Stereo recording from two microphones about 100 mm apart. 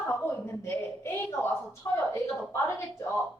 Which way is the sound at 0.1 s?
25° left (ahead or behind).